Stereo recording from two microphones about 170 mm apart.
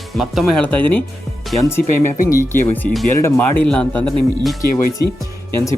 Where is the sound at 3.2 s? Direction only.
10° left (ahead or behind).